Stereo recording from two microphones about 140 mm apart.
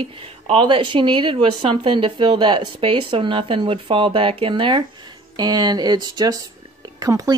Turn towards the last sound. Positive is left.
turn(degrees=-25)  # may be behind; listen again after turning